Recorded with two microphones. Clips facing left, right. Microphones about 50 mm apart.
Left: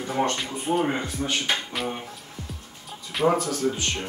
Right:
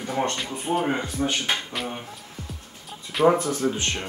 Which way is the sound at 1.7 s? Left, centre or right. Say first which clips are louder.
Left 1 dB; centre.